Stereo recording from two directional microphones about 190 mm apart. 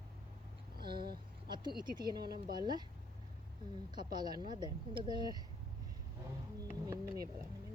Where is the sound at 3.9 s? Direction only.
20° right (ahead or behind).